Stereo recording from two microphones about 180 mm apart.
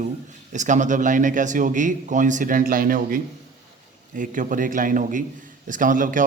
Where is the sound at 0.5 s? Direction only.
45° right (ahead or behind).